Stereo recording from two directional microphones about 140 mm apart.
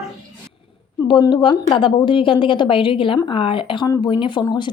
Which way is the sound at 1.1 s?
30° left (ahead or behind).